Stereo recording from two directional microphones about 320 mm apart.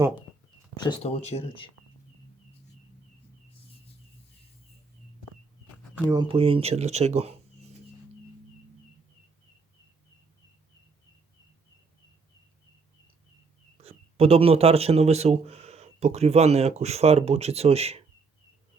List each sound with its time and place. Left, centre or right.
0.8 s speech: centre
6.1 s speech: centre
13.8 s speech: centre